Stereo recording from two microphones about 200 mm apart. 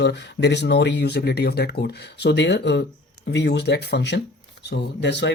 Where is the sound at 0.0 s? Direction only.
60° left (ahead or behind).